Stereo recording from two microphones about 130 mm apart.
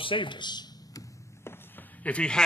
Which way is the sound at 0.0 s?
40° left (ahead or behind).